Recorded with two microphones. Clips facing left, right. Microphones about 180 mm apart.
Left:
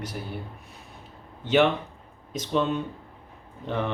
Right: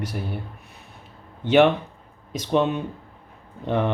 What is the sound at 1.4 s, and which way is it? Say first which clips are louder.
Speech: right 5 dB; 60° right (ahead or behind).